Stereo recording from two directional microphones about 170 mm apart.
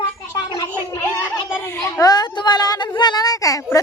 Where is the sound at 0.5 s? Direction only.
25° left (ahead or behind).